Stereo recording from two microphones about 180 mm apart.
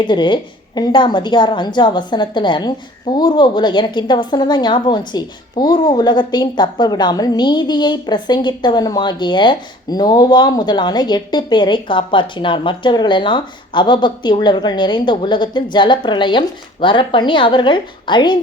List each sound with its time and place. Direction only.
0.0 s a woman's voice: 25° left (ahead or behind)